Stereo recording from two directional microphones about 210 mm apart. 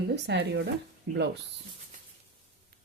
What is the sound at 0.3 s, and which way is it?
Speech, 55° right (ahead or behind).